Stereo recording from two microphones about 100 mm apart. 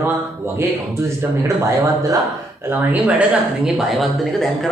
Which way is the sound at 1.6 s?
35° right (ahead or behind).